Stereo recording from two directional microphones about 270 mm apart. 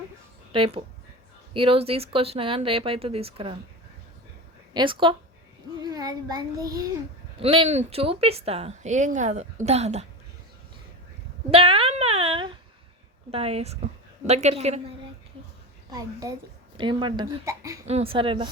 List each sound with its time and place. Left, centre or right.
0.5 s speech: centre
4.7 s speech: centre
11.5 s a sound: centre
13.3 s speech: right
17.8 s speech: right